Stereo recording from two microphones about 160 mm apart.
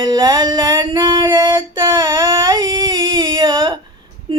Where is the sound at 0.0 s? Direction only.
25° right (ahead or behind).